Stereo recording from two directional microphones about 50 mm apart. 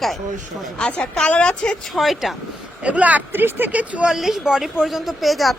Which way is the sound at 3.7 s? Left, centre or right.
Right.